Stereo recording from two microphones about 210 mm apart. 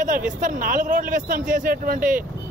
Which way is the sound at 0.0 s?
40° right (ahead or behind).